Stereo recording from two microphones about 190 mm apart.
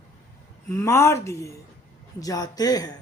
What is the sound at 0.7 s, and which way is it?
Speech, 15° left (ahead or behind).